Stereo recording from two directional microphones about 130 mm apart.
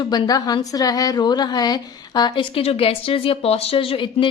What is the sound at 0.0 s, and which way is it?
A woman's voice, 35° left (ahead or behind).